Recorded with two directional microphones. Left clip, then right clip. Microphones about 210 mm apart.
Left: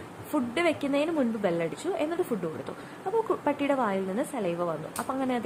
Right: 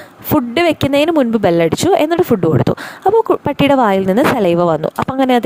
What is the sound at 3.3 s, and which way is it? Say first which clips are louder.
Speech: right 14 dB; 50° right (ahead or behind).